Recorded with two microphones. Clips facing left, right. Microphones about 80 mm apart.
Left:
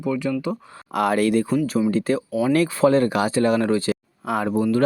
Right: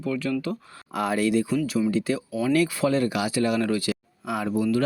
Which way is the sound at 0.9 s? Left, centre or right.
Left.